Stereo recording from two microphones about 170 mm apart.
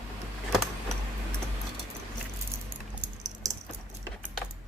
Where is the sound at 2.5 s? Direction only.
15° right (ahead or behind).